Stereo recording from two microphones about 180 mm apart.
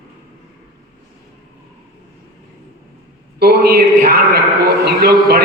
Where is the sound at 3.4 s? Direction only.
60° right (ahead or behind).